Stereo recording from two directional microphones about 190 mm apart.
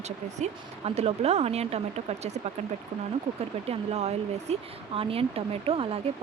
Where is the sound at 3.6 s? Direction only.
35° right (ahead or behind).